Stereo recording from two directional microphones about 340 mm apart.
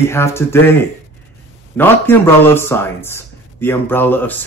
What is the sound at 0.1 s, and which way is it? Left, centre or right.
Speech, centre.